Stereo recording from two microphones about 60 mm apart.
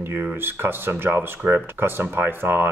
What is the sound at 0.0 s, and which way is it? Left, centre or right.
Speech, right.